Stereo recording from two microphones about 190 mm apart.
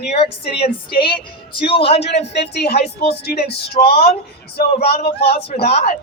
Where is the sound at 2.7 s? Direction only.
55° left (ahead or behind).